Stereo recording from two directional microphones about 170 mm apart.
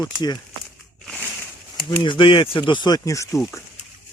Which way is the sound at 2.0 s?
30° left (ahead or behind).